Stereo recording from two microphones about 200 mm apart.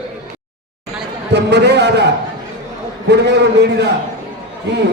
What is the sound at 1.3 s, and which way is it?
Speech, 55° right (ahead or behind).